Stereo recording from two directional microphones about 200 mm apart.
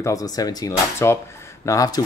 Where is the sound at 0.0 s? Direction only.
15° left (ahead or behind).